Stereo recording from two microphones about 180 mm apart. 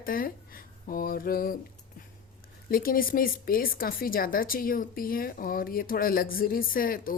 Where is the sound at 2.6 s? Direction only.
55° left (ahead or behind).